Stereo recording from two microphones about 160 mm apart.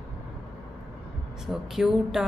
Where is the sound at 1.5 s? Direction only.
Centre (ahead or behind).